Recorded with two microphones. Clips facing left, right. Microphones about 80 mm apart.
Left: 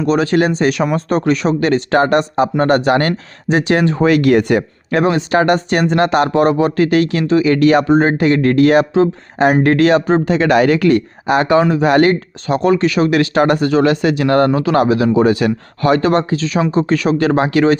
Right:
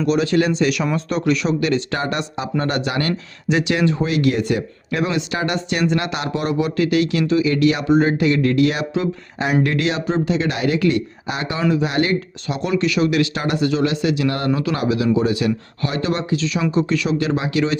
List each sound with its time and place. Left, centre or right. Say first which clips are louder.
0.0 s speech: left 4 dB; left
14.5 s speech: left 7 dB; left